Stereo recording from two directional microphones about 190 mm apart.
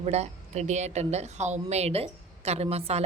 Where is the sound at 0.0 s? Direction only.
35° right (ahead or behind).